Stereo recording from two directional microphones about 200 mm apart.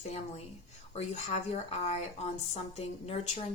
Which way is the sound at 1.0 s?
30° left (ahead or behind).